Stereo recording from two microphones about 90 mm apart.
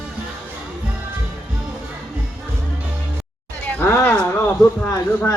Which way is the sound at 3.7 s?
25° left (ahead or behind).